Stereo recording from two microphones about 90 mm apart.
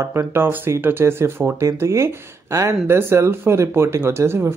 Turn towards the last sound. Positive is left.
turn(degrees=-30)  # may be behind; listen again after turning